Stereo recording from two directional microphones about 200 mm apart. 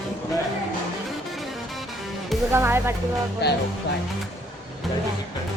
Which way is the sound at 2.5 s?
10° right (ahead or behind).